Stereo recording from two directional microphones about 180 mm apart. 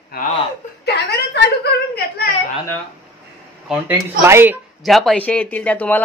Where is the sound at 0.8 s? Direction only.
65° left (ahead or behind).